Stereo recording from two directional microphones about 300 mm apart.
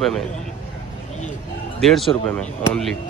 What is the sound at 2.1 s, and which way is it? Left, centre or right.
Speech, centre.